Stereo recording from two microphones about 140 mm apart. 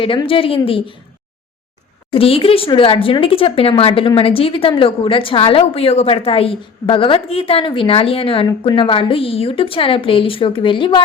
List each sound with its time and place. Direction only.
0.0 s speech: 40° left (ahead or behind)
2.1 s speech: 40° left (ahead or behind)